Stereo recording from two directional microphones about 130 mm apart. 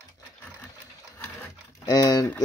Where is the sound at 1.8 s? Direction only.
25° left (ahead or behind).